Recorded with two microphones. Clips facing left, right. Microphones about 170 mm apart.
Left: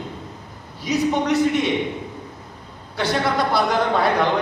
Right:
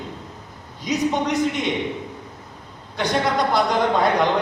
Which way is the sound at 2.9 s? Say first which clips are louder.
Even; 20° right (ahead or behind).